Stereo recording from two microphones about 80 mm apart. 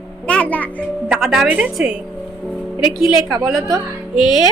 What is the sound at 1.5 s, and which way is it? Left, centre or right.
A woman's voice, centre.